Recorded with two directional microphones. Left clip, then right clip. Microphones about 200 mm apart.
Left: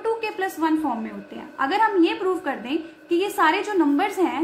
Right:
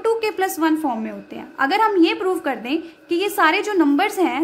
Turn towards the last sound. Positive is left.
turn(degrees=-45)  # may be behind; listen again after turning